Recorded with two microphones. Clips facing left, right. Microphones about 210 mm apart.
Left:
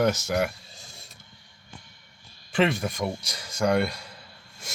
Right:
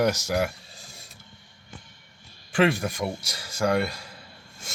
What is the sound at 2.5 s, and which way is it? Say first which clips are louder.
Speech: right 2 dB; 5° right (ahead or behind).